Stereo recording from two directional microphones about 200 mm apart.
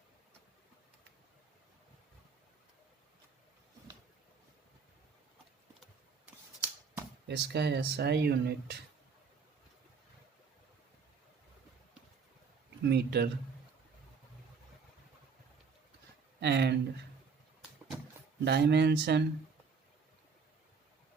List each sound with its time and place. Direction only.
5.8 s a sound: 10° right (ahead or behind)
7.3 s speech: 60° right (ahead or behind)
12.8 s speech: 55° right (ahead or behind)
16.4 s speech: 60° right (ahead or behind)
18.4 s speech: 55° right (ahead or behind)